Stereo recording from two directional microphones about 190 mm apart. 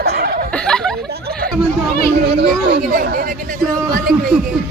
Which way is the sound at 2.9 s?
45° right (ahead or behind).